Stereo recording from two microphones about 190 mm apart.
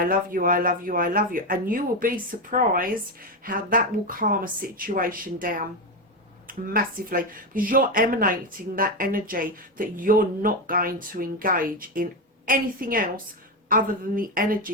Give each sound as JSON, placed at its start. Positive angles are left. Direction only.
{"t": 0.0, "sound": "speech", "side_deg": -50}